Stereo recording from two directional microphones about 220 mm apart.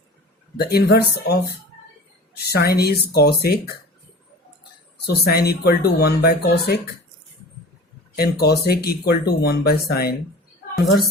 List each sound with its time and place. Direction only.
0.5 s speech: 45° left (ahead or behind)
4.9 s speech: 45° left (ahead or behind)
8.1 s speech: 45° left (ahead or behind)